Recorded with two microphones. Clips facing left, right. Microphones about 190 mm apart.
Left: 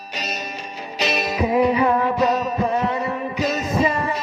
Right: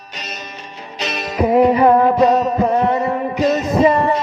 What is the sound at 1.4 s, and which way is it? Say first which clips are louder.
Music: right 6 dB; 50° right (ahead or behind).